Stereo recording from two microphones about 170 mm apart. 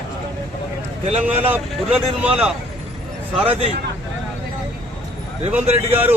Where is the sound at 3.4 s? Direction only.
35° right (ahead or behind).